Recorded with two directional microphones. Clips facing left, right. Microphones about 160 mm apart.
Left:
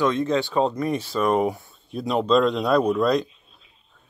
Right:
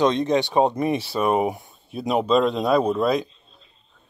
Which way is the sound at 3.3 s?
5° left (ahead or behind).